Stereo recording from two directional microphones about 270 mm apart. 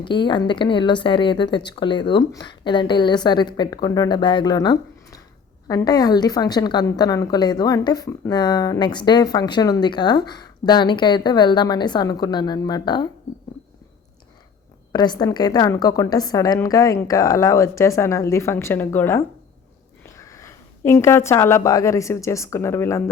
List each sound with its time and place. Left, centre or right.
0.0 s a woman's voice: centre
14.9 s a woman's voice: centre